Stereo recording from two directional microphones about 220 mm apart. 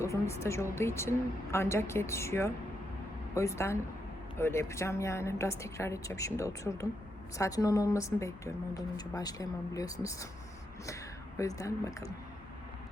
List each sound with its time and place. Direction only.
0.0 s a woman's voice: 10° left (ahead or behind)
11.3 s a woman's voice: 15° left (ahead or behind)